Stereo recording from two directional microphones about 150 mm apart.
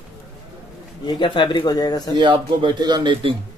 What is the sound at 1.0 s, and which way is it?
Speech, 35° left (ahead or behind).